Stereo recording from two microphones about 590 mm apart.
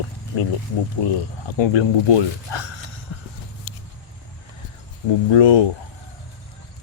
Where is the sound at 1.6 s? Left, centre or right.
Left.